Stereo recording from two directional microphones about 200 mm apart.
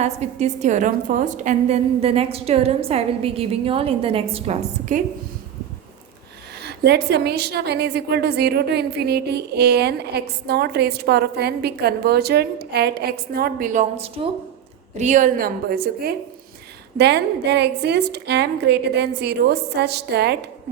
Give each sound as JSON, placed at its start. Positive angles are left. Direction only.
{"t": 0.0, "sound": "a woman's voice", "side_deg": -35}
{"t": 6.6, "sound": "a woman's voice", "side_deg": -55}